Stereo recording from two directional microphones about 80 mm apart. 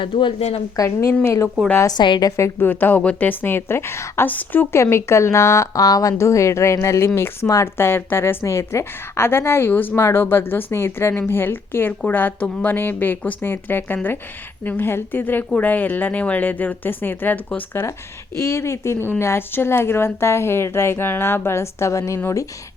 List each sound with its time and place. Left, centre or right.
0.0 s a woman's voice: left
0.8 s a woman's voice: left
2.0 s a woman's voice: left
2.3 s a woman's voice: left
4.3 s a woman's voice: left
4.7 s a woman's voice: left
7.8 s a woman's voice: left
18.3 s a woman's voice: left